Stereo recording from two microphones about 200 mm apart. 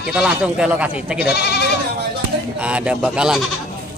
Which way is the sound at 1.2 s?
55° left (ahead or behind).